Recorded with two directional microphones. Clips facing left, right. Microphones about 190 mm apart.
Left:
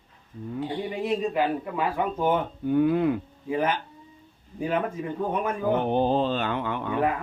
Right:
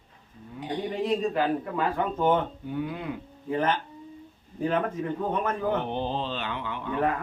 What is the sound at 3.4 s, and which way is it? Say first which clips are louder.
Speech: even; 10° left (ahead or behind).